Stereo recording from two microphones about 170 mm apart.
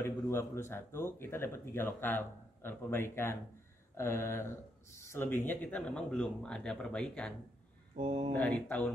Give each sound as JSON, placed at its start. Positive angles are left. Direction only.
{"t": 0.0, "sound": "a sound", "side_deg": 15}
{"t": 0.7, "sound": "speech", "side_deg": 15}
{"t": 8.0, "sound": "speech", "side_deg": -30}
{"t": 8.4, "sound": "speech", "side_deg": 10}